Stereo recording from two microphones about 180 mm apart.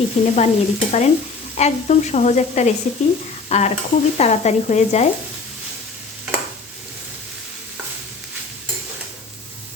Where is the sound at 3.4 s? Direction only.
40° left (ahead or behind).